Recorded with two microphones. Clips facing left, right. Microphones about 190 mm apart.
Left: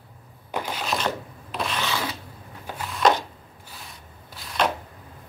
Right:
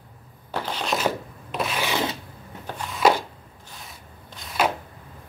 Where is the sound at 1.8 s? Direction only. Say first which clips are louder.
Right 3 dB; 20° right (ahead or behind).